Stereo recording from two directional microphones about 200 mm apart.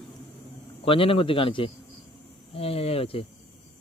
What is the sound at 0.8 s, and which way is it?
A man's voice, 25° left (ahead or behind).